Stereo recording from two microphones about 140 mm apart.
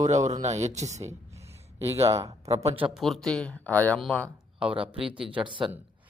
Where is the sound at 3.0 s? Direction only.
Centre (ahead or behind).